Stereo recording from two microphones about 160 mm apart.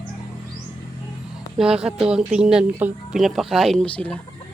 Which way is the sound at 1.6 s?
5° right (ahead or behind).